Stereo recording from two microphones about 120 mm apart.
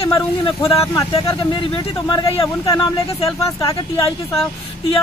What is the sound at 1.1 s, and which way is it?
Speech, 45° left (ahead or behind).